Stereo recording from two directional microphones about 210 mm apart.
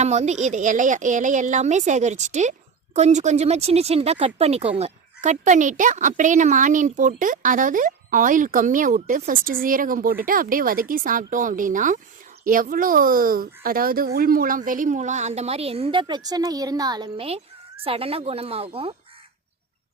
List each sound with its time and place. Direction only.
0.0 s a woman's voice: 35° right (ahead or behind)